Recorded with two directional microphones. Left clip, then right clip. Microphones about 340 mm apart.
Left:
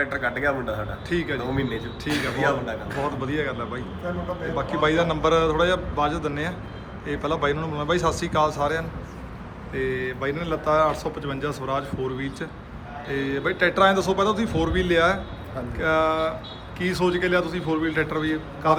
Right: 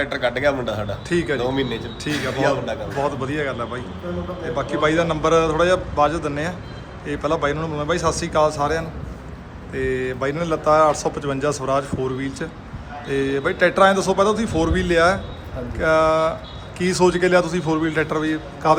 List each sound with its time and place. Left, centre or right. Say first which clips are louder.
0.0 s a man's voice: right 4 dB; right
1.1 s a man's voice: right 5 dB; centre